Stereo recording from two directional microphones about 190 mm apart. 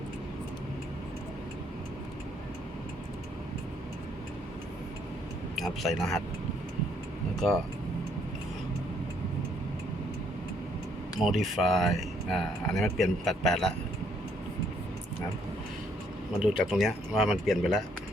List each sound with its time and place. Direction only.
5.5 s speech: centre (ahead or behind)
7.3 s speech: centre (ahead or behind)
11.2 s speech: centre (ahead or behind)
16.4 s speech: 5° right (ahead or behind)